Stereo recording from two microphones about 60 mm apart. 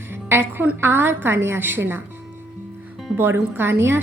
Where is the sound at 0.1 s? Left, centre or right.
Right.